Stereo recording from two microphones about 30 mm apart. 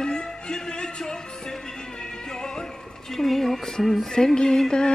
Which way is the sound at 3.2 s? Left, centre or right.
Centre.